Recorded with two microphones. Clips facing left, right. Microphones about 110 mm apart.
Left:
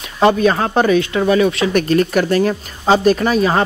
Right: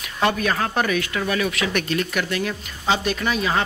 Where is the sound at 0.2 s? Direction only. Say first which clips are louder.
Left 8 dB; 30° left (ahead or behind).